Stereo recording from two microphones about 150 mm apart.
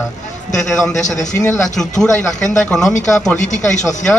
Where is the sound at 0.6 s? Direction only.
5° left (ahead or behind).